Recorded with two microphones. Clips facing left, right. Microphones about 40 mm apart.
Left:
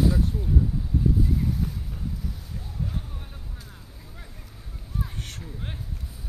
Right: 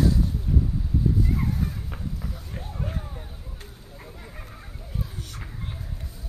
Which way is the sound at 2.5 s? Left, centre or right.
Right.